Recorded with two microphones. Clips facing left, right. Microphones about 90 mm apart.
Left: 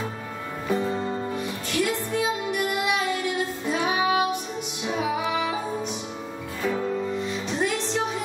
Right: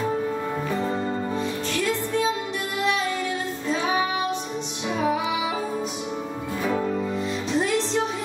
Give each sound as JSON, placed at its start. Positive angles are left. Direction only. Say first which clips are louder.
{"t": 1.4, "sound": "music", "louder": "right 1 dB", "side_deg": 15}
{"t": 3.6, "sound": "music", "louder": "right 1 dB", "side_deg": 15}